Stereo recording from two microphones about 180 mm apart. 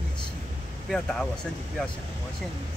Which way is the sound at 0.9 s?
Centre (ahead or behind).